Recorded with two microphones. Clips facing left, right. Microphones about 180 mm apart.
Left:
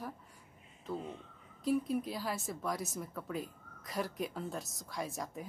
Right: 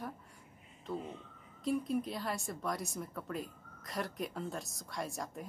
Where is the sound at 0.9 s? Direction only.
Centre (ahead or behind).